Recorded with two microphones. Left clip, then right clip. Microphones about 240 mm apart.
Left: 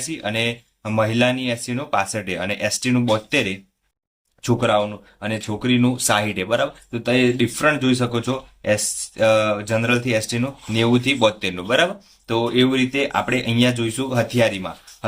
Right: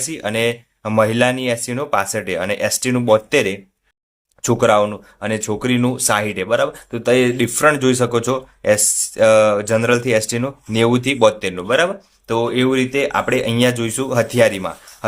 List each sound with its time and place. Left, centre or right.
0.0 s speech: centre